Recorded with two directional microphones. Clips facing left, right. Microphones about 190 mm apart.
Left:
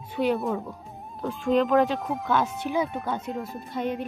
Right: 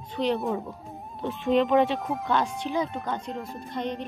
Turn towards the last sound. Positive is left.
turn(degrees=5)  # may be behind; listen again after turning